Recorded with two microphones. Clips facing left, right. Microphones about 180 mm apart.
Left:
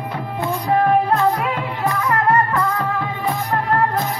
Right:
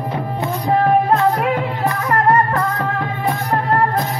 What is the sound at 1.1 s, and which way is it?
Music, 60° right (ahead or behind).